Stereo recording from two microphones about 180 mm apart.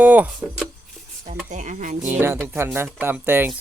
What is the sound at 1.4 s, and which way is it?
Speech, 40° right (ahead or behind).